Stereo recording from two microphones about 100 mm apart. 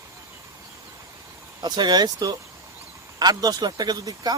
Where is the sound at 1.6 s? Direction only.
45° right (ahead or behind).